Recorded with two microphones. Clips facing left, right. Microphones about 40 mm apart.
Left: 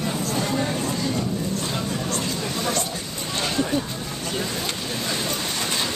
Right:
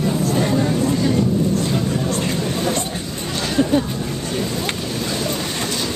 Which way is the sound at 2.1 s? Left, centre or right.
Right.